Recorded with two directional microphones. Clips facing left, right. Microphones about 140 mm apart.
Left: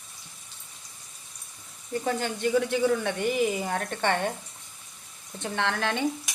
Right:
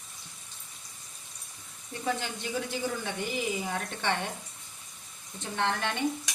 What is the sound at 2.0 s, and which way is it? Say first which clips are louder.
Speech: left 5 dB; 50° left (ahead or behind).